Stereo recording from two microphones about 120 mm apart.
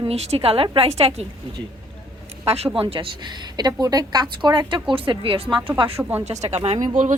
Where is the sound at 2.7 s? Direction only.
50° right (ahead or behind).